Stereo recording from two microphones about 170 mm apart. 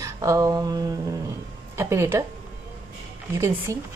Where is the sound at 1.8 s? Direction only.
15° right (ahead or behind).